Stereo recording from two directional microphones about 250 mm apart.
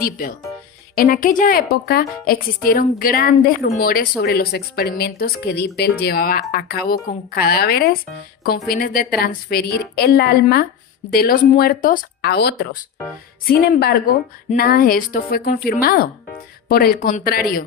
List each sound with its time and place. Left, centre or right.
0.0 s a woman's voice: left